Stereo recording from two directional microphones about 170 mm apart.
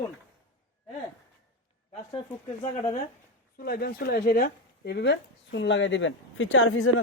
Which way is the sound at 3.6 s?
65° left (ahead or behind).